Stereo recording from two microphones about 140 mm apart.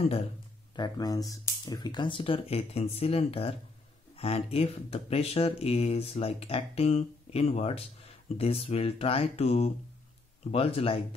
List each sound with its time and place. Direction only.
0.7 s speech: 30° left (ahead or behind)